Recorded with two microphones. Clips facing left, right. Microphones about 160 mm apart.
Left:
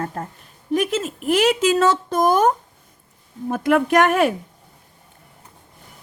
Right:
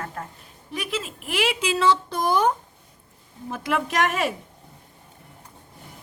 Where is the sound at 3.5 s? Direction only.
55° left (ahead or behind).